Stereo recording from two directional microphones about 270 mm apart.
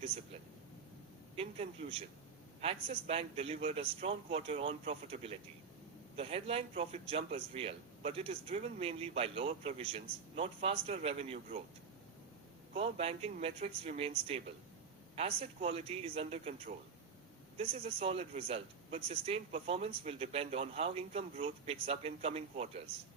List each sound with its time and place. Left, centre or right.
1.4 s a man's voice: right
12.7 s a man's voice: right
15.1 s a man's voice: right